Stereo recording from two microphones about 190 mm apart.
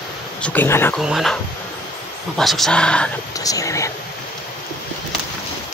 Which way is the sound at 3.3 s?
20° left (ahead or behind).